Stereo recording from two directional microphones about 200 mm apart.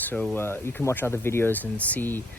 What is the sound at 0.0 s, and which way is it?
Speech, 10° left (ahead or behind).